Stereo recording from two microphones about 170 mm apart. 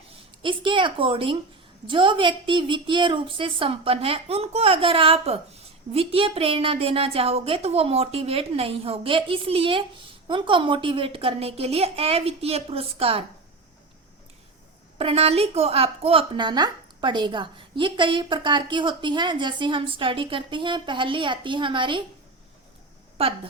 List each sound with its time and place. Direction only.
0.4 s a woman's voice: 30° right (ahead or behind)
14.9 s a woman's voice: 35° right (ahead or behind)
23.1 s speech: 35° right (ahead or behind)